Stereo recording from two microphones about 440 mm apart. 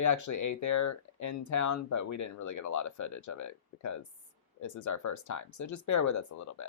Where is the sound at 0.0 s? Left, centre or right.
Left.